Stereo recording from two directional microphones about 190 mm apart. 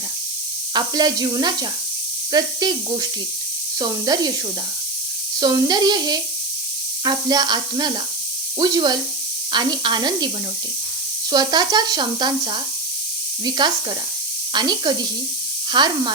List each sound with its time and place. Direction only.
0.7 s speech: 20° right (ahead or behind)
5.4 s speech: 20° right (ahead or behind)
11.3 s speech: 20° right (ahead or behind)